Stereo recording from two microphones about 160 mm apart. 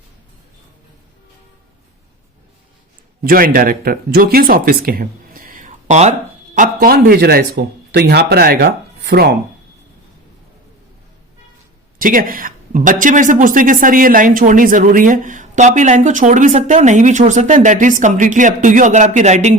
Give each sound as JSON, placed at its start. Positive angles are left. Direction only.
{"t": 3.2, "sound": "speech", "side_deg": -65}
{"t": 11.9, "sound": "speech", "side_deg": -60}